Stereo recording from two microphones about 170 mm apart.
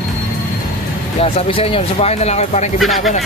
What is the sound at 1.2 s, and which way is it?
Speech, 35° left (ahead or behind).